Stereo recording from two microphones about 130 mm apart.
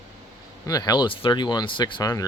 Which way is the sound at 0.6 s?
30° left (ahead or behind).